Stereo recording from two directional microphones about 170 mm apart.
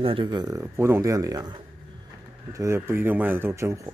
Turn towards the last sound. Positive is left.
turn(degrees=-15)  # may be behind; listen again after turning